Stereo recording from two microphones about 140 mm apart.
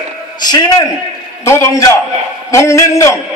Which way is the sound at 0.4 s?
30° left (ahead or behind).